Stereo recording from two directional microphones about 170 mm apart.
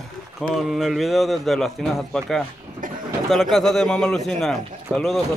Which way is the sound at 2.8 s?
50° right (ahead or behind).